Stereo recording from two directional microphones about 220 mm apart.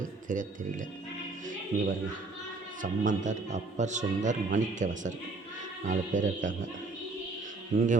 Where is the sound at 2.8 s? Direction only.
35° right (ahead or behind).